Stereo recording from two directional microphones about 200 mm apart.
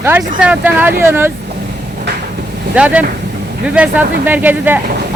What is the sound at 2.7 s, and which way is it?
Speech, 5° right (ahead or behind).